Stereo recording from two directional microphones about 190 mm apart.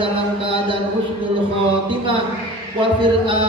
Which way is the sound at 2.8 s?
25° right (ahead or behind).